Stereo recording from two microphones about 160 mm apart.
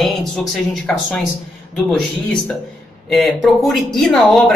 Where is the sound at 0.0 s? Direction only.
Centre (ahead or behind).